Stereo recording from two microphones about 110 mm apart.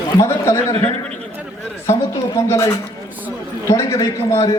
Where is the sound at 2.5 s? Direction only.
25° left (ahead or behind).